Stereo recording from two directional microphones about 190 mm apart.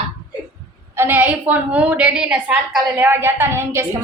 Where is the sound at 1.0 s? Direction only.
10° right (ahead or behind).